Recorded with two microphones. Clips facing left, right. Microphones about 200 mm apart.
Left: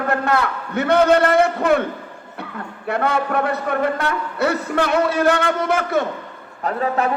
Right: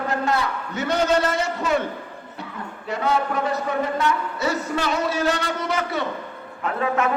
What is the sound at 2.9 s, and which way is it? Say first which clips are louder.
A man's voice: left 3 dB; 60° left (ahead or behind).